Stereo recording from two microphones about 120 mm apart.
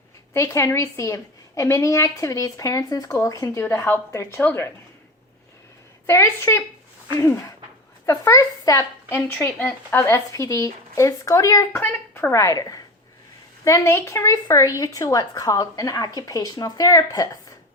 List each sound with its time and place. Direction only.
0.3 s a woman's voice: 25° left (ahead or behind)
6.1 s a woman's voice: 20° left (ahead or behind)
11.8 s a woman's voice: 15° left (ahead or behind); by 17.2 s 30° left (ahead or behind)